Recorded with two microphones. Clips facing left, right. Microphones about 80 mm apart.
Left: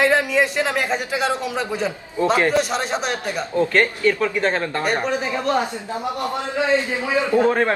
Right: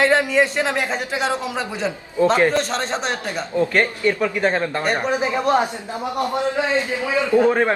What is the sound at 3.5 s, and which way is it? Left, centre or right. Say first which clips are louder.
Speech: even; centre.